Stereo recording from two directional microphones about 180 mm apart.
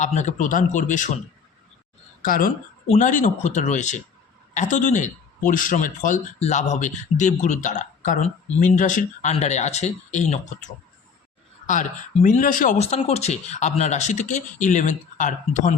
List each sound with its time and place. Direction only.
0.0 s speech: 40° left (ahead or behind)
2.2 s speech: 50° left (ahead or behind)